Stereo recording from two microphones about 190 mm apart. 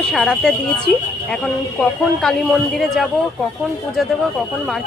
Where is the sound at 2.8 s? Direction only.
Centre (ahead or behind).